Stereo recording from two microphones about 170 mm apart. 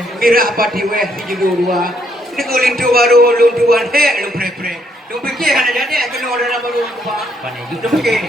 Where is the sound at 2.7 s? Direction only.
60° right (ahead or behind).